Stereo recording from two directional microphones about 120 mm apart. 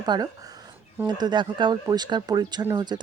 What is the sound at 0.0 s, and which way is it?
A woman's voice, 35° right (ahead or behind).